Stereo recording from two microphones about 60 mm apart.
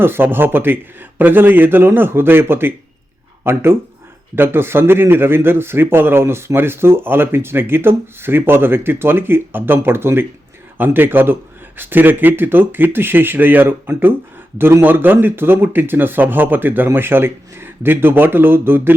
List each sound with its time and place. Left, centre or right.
0.0 s speech: right